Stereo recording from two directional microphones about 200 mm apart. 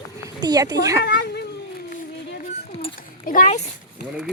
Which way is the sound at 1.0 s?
55° left (ahead or behind).